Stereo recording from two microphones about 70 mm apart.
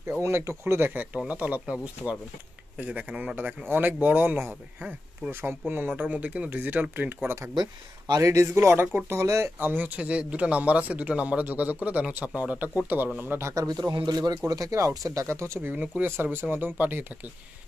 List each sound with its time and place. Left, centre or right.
0.2 s speech: right
1.1 s speech: centre
8.2 s speech: right
9.6 s speech: right
13.6 s speech: right
14.5 s speech: right
15.6 s speech: right